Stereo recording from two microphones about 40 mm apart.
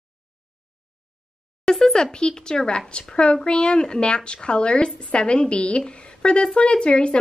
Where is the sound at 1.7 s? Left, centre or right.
Centre.